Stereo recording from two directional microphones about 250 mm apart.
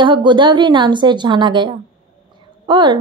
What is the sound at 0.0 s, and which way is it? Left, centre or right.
A woman's voice, centre.